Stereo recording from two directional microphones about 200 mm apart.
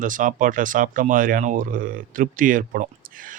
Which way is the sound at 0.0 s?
40° right (ahead or behind).